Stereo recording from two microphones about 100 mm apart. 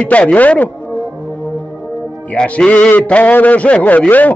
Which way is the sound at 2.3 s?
10° left (ahead or behind).